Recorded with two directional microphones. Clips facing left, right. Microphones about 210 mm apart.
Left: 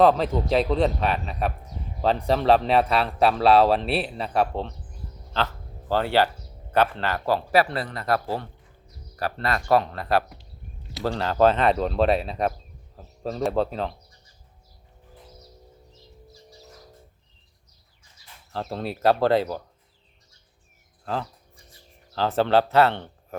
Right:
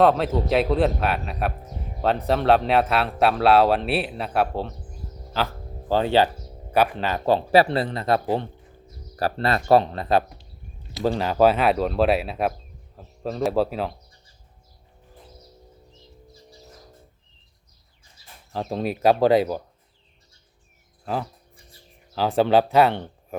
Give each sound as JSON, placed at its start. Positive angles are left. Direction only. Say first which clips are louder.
{"t": 0.0, "sound": "speech", "louder": "even", "side_deg": 0}
{"t": 5.9, "sound": "speech", "louder": "right 2 dB", "side_deg": -15}
{"t": 9.1, "sound": "speech", "louder": "right 4 dB", "side_deg": -35}
{"t": 18.5, "sound": "speech", "louder": "right 4 dB", "side_deg": -15}
{"t": 21.0, "sound": "speech", "louder": "right 2 dB", "side_deg": -10}